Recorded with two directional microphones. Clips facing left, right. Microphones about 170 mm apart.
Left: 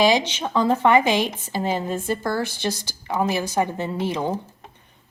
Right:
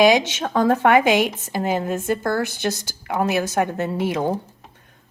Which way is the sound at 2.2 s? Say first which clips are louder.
Right 2 dB; 50° right (ahead or behind).